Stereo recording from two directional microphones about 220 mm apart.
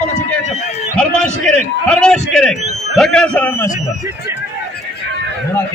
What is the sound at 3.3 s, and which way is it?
Speech, 10° left (ahead or behind).